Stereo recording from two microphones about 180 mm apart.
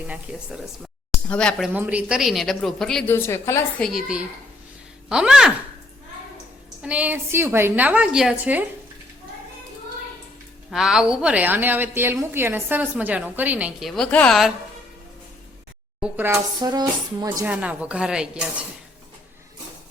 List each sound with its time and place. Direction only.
1.1 s speech: 5° left (ahead or behind)
1.7 s speech: 10° right (ahead or behind)
3.2 s a woman's voice: 15° left (ahead or behind)
3.8 s speech: centre (ahead or behind)
6.8 s a woman's voice: 10° right (ahead or behind)
10.7 s a woman's voice: 5° right (ahead or behind)
16.0 s speech: 10° right (ahead or behind)
17.4 s a woman's voice: 10° right (ahead or behind)